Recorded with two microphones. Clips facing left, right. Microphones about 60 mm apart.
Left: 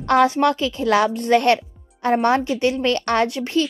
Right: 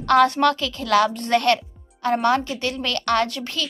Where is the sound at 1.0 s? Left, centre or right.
Centre.